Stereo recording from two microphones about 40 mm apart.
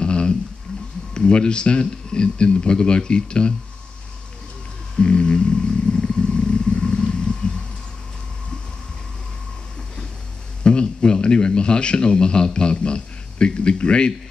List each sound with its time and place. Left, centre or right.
0.0 s a sound: left
1.1 s speech: left
4.9 s roaring cats: left
10.6 s speech: left